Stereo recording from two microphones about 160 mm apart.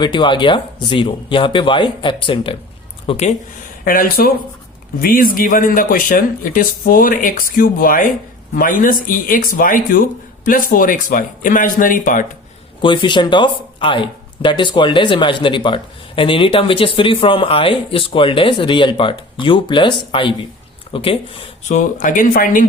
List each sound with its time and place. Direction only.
0.0 s speech: 30° left (ahead or behind)
3.8 s speech: 65° left (ahead or behind)
12.8 s speech: 30° left (ahead or behind)
21.7 s speech: 50° left (ahead or behind)